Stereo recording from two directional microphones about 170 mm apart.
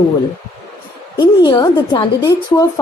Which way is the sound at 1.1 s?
25° left (ahead or behind).